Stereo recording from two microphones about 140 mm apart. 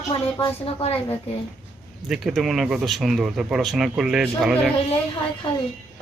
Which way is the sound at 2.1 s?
Centre (ahead or behind).